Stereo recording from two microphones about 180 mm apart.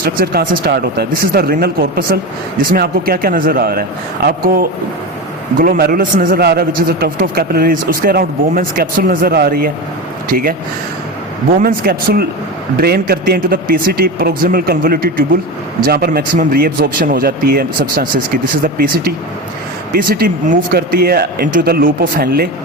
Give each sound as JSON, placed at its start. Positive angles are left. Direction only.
{"t": 0.0, "sound": "a man's voice", "side_deg": -55}
{"t": 11.6, "sound": "a man's voice", "side_deg": -55}